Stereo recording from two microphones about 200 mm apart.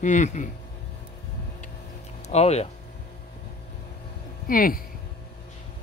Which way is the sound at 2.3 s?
30° left (ahead or behind).